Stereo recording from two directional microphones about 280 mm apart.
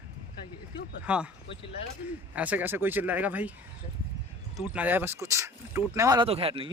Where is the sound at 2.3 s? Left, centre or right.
Centre.